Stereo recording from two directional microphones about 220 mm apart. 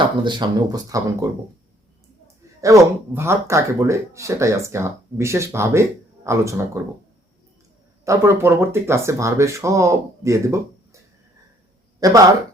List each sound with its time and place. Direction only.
0.0 s speech: 20° right (ahead or behind)
8.0 s speech: 10° right (ahead or behind)